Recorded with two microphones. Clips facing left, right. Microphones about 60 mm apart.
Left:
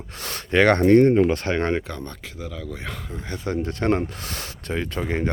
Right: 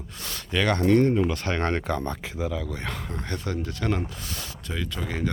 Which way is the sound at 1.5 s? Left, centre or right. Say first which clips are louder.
Left 3 dB; centre.